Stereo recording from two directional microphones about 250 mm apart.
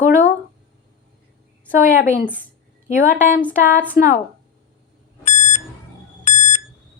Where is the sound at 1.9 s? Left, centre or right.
Left.